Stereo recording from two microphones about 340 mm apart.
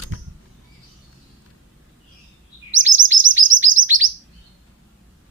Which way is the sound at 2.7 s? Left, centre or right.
Right.